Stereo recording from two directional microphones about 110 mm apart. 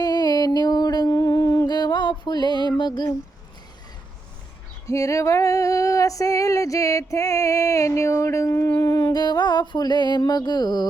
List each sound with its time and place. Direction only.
0.0 s music: 35° left (ahead or behind)
2.6 s female singing: 40° left (ahead or behind)
4.9 s female singing: 25° left (ahead or behind)